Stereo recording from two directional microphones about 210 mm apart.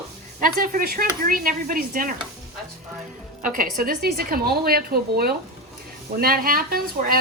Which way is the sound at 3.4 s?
40° right (ahead or behind).